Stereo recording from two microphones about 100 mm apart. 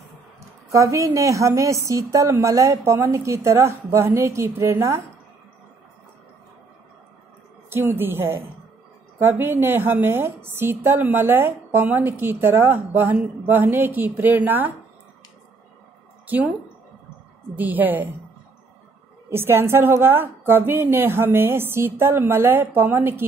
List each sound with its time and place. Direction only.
0.7 s a woman's voice: 30° right (ahead or behind)
7.7 s a woman's voice: 20° right (ahead or behind)
16.3 s speech: 15° right (ahead or behind)
17.6 s a woman's voice: 15° right (ahead or behind)
19.2 s a woman's voice: 25° right (ahead or behind)